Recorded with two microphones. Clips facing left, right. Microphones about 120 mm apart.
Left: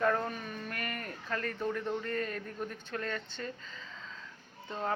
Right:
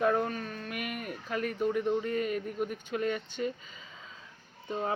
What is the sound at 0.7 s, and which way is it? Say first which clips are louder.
Speech: right 4 dB; 10° right (ahead or behind).